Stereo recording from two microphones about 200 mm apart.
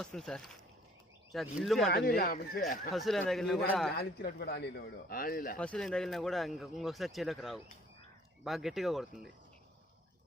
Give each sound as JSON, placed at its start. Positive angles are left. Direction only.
{"t": 0.0, "sound": "a man's voice", "side_deg": 5}
{"t": 1.9, "sound": "a man's voice", "side_deg": 50}
{"t": 2.9, "sound": "a man's voice", "side_deg": 0}
{"t": 3.9, "sound": "a man's voice", "side_deg": 55}
{"t": 5.5, "sound": "a man's voice", "side_deg": 5}